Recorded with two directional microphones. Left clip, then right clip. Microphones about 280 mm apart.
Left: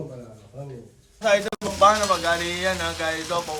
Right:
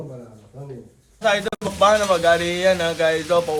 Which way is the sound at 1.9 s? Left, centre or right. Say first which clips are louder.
Right 5 dB; centre.